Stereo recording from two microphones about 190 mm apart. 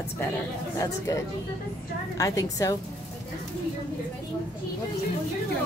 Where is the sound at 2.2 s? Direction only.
15° left (ahead or behind).